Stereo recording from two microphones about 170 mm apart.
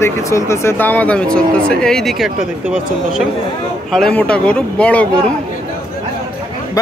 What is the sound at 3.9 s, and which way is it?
Speech, 5° left (ahead or behind).